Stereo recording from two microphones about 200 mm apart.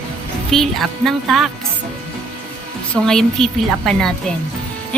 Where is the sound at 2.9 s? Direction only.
5° left (ahead or behind).